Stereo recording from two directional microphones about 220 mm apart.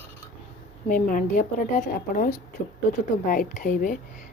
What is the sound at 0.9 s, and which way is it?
A woman's voice, 35° left (ahead or behind).